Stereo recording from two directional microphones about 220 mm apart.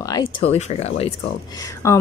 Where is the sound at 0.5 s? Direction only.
30° left (ahead or behind).